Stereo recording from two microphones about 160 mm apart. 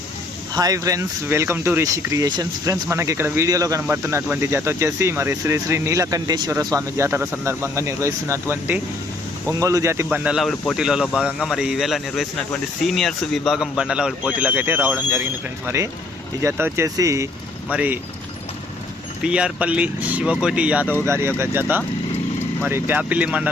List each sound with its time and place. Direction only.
0.5 s speech: 20° right (ahead or behind)
19.2 s speech: 5° right (ahead or behind)